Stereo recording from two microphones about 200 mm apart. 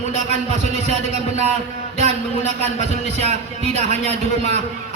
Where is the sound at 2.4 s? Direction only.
35° left (ahead or behind).